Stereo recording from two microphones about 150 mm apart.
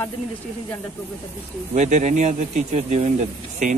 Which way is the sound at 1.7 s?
50° right (ahead or behind).